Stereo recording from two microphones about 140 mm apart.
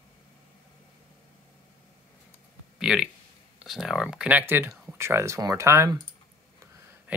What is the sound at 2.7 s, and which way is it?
Speech, 5° right (ahead or behind).